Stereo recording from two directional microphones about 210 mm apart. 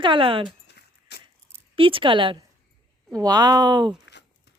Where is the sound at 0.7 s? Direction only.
50° left (ahead or behind).